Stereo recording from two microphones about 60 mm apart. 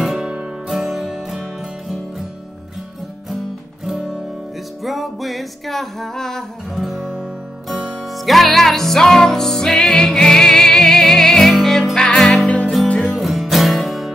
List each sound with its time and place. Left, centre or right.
0.0 s music: centre
4.8 s music: centre
12.4 s music: left
13.1 s music: centre